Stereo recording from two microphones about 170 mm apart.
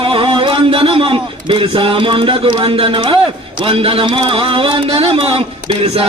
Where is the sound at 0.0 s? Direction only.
30° right (ahead or behind).